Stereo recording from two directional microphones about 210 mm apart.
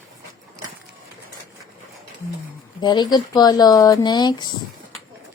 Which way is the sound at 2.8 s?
20° left (ahead or behind).